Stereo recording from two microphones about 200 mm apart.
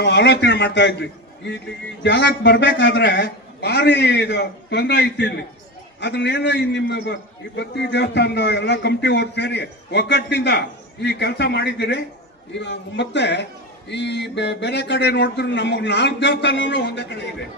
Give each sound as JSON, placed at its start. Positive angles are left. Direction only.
{"t": 0.0, "sound": "a man's voice", "side_deg": 60}